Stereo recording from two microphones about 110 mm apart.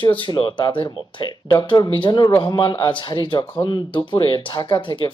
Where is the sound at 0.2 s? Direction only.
45° left (ahead or behind).